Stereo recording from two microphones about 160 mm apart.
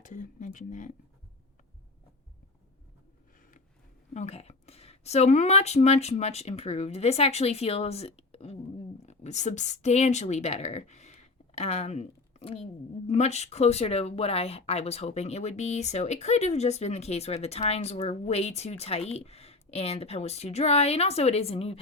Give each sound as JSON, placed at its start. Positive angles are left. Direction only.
{"t": 0.0, "sound": "speech", "side_deg": 55}
{"t": 4.1, "sound": "speech", "side_deg": 45}